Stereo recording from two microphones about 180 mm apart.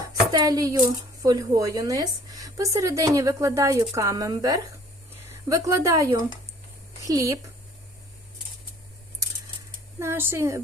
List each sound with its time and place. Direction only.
0.3 s a woman's voice: 20° right (ahead or behind)
10.0 s speech: 15° right (ahead or behind)